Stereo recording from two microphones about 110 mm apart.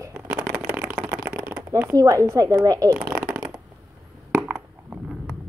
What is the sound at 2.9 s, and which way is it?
Shuffling cards, 15° right (ahead or behind).